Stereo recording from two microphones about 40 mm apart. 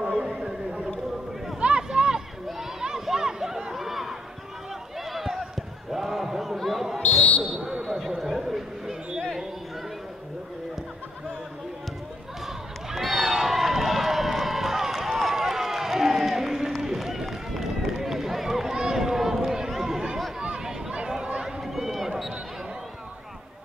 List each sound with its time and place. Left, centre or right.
0.3 s horse: centre
1.6 s a sound: right
2.8 s chatter: centre
4.9 s a sound: centre
5.9 s basketball bounce: centre
7.4 s a sound: centre
12.9 s run: centre
21.1 s chatter: right
21.6 s run: centre